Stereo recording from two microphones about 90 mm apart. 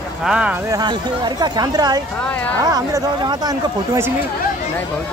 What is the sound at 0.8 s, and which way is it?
Speech, 55° right (ahead or behind).